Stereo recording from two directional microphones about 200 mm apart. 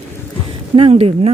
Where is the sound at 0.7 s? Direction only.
30° right (ahead or behind).